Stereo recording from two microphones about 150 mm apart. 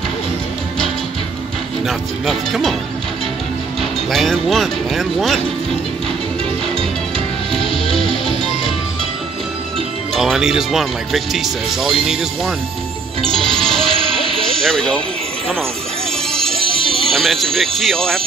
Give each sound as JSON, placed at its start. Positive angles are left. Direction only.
{"t": 1.9, "sound": "speech", "side_deg": 0}
{"t": 4.1, "sound": "speech", "side_deg": 0}
{"t": 7.5, "sound": "music", "side_deg": 5}
{"t": 10.1, "sound": "speech", "side_deg": 0}
{"t": 13.3, "sound": "music", "side_deg": 5}
{"t": 13.8, "sound": "music", "side_deg": -40}
{"t": 14.6, "sound": "speech", "side_deg": 5}
{"t": 16.6, "sound": "speech", "side_deg": 0}